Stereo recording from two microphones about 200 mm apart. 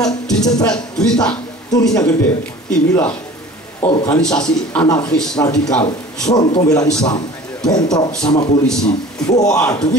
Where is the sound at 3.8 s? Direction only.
20° left (ahead or behind).